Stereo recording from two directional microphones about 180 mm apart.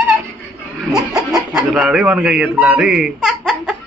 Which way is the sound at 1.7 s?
Centre (ahead or behind).